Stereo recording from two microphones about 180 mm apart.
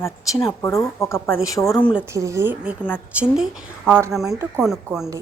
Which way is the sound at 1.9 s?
15° right (ahead or behind).